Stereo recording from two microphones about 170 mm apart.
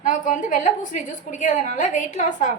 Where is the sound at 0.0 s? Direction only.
50° left (ahead or behind).